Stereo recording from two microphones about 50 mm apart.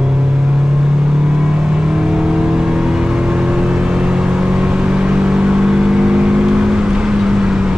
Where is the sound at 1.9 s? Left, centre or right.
Centre.